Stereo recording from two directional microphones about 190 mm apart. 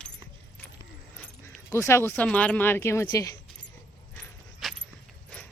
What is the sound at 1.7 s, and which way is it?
Speech, 15° left (ahead or behind).